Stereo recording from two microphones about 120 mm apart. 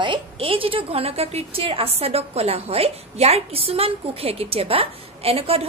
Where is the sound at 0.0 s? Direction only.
45° right (ahead or behind).